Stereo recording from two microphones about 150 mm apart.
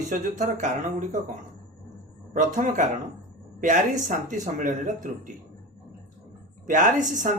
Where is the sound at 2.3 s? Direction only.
60° right (ahead or behind).